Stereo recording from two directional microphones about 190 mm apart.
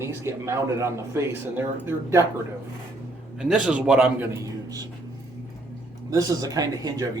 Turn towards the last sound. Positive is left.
turn(degrees=-20)  # may be behind; listen again after turning